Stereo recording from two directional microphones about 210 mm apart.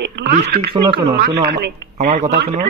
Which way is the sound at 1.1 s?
50° right (ahead or behind).